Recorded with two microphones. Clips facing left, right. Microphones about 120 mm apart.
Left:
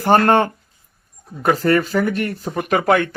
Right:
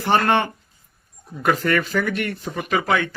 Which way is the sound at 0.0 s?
45° left (ahead or behind).